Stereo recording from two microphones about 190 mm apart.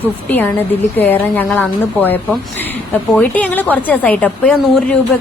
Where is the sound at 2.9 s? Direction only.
10° left (ahead or behind).